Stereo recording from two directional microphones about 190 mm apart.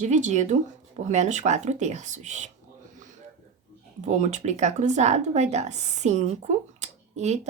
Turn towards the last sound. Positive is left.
turn(degrees=-35)  # may be behind; listen again after turning